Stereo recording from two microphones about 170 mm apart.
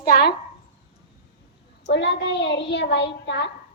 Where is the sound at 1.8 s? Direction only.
90° left.